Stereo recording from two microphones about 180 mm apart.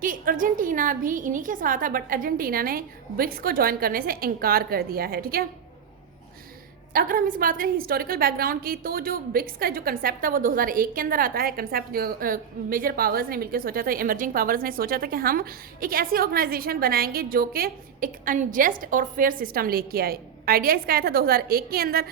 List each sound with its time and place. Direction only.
0.0 s a woman's voice: 50° right (ahead or behind)
6.9 s a woman's voice: 50° right (ahead or behind)